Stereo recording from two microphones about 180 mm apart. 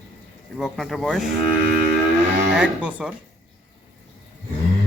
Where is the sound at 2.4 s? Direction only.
5° right (ahead or behind).